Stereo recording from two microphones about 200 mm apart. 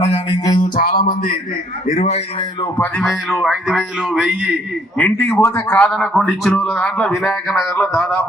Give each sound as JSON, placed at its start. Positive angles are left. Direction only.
{"t": 0.6, "sound": "music", "side_deg": 45}
{"t": 1.9, "sound": "a man's voice", "side_deg": 35}
{"t": 3.0, "sound": "a man's voice", "side_deg": 0}
{"t": 4.9, "sound": "a man's voice", "side_deg": 10}